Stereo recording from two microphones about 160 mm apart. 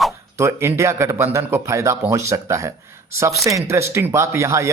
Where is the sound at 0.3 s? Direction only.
15° right (ahead or behind).